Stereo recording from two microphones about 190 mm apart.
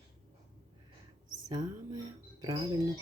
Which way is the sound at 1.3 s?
20° right (ahead or behind).